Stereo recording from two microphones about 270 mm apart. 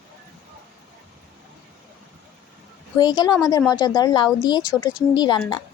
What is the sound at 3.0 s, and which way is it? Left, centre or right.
A woman's voice, centre.